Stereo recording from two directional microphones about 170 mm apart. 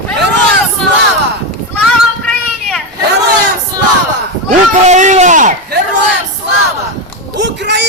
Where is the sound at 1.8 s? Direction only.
5° left (ahead or behind).